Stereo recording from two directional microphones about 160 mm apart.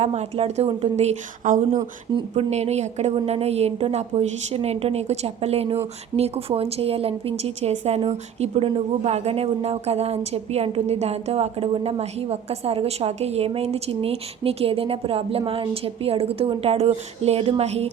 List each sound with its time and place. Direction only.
0.0 s speech: 40° right (ahead or behind)
2.1 s a woman's voice: 40° right (ahead or behind)